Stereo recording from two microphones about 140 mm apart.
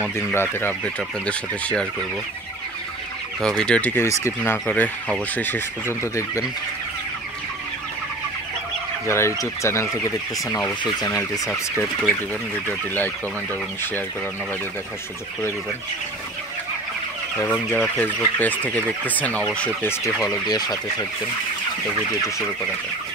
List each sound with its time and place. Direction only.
0.1 s speech: 15° left (ahead or behind)
3.3 s speech: 5° left (ahead or behind)
9.0 s speech: 20° left (ahead or behind)
11.1 s speech: 25° left (ahead or behind)
12.6 s speech: 15° left (ahead or behind)
17.4 s speech: 15° left (ahead or behind)
20.4 s speech: 30° left (ahead or behind)